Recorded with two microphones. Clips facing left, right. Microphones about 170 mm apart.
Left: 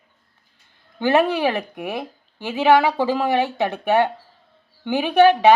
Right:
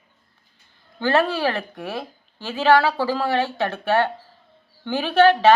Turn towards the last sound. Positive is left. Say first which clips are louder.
# left 1 dB
turn(degrees=15)  # may be behind; listen again after turning